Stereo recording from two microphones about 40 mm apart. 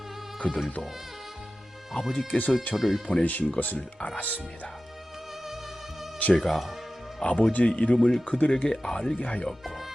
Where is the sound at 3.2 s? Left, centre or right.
Left.